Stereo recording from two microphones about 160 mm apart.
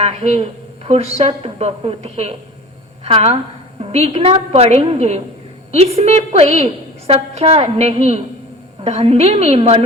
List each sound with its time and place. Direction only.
0.0 s a woman's voice: 40° right (ahead or behind)